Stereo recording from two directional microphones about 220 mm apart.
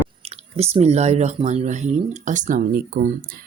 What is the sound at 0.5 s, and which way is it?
Speech, 30° right (ahead or behind).